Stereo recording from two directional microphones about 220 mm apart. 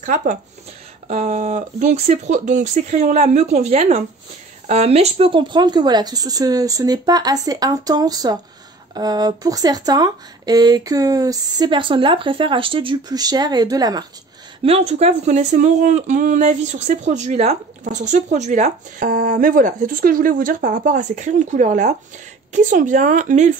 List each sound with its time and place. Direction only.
0.0 s speech: 35° right (ahead or behind); by 14.0 s 15° right (ahead or behind)
14.6 s speech: 30° right (ahead or behind)